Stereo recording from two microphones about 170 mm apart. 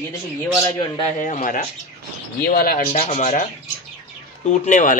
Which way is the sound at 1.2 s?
45° left (ahead or behind).